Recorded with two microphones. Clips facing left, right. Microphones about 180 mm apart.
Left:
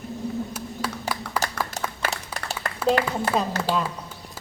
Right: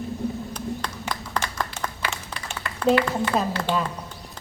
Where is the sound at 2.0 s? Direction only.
40° left (ahead or behind).